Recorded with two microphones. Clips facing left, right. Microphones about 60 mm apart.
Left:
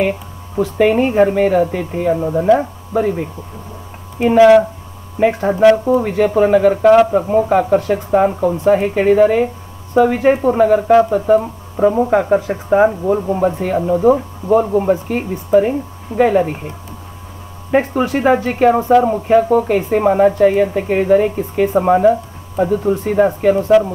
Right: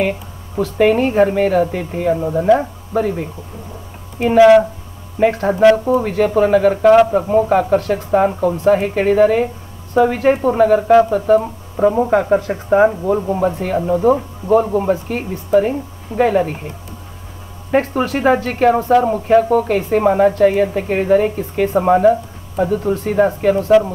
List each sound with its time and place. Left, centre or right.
0.7 s a woman's voice: centre
4.3 s speech: centre
5.2 s a woman's voice: centre
17.6 s a woman's voice: centre